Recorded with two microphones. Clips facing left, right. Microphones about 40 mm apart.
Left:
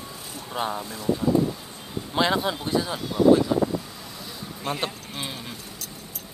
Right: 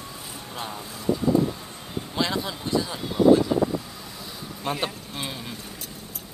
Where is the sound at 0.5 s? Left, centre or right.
Left.